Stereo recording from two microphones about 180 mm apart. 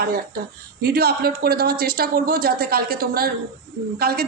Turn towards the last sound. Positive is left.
turn(degrees=-60)  # may be behind; listen again after turning